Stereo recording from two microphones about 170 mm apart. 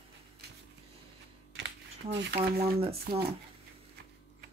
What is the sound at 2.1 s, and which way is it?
Speech, 90° right.